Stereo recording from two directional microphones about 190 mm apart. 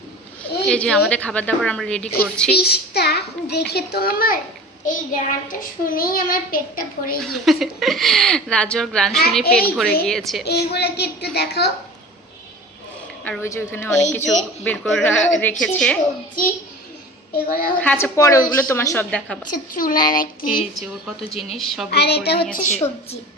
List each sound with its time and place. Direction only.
0.7 s a woman's voice: 5° left (ahead or behind)
2.6 s a child's voice: 55° left (ahead or behind)
7.2 s a woman's voice: centre (ahead or behind)
9.4 s a child's voice: 55° left (ahead or behind)
10.1 s a woman's voice: centre (ahead or behind)
10.4 s a child's voice: 60° left (ahead or behind)
13.2 s a woman's voice: 10° left (ahead or behind)
17.3 s a child's voice: 50° left (ahead or behind)
17.7 s a woman's voice: 10° left (ahead or behind)
19.5 s a child's voice: 45° left (ahead or behind)
20.7 s a woman's voice: centre (ahead or behind)
21.8 s a child's voice: 60° left (ahead or behind)
22.5 s a woman's voice: 35° left (ahead or behind)